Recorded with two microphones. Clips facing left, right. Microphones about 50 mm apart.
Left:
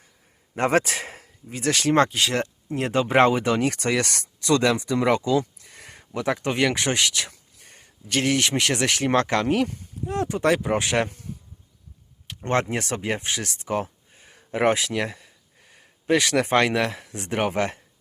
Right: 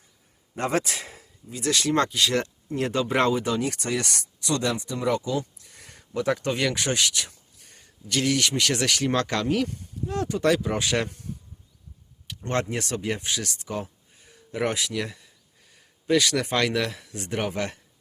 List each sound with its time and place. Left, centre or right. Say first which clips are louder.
0.5 s speech: left 5 dB; left
3.8 s speech: left 4 dB; left
7.3 s a sound: left 4 dB; left
8.0 s speech: left 2 dB; left
12.3 s speech: left 3 dB; left